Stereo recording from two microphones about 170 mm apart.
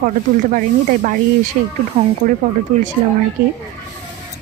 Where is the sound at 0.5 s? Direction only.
50° right (ahead or behind).